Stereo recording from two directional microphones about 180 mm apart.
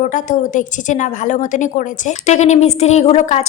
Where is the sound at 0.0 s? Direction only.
45° left (ahead or behind).